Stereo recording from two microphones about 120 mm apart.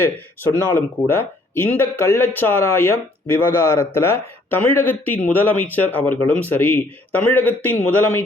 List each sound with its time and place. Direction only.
0.4 s speech: 20° left (ahead or behind)